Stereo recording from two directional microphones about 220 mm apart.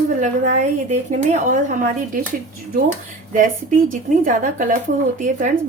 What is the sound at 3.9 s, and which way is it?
Speech, 35° right (ahead or behind).